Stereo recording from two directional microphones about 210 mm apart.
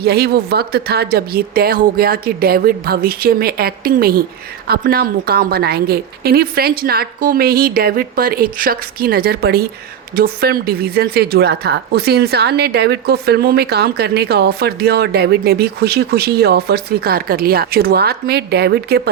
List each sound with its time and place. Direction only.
0.0 s a woman's voice: 50° right (ahead or behind)